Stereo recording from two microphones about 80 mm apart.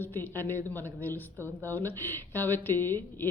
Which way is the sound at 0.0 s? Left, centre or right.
Left.